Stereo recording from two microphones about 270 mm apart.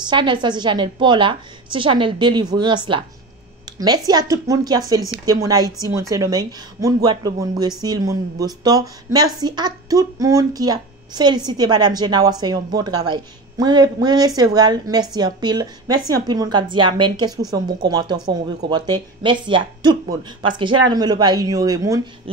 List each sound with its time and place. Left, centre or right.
0.0 s speech: centre
3.6 s a sound: centre
4.1 s speech: centre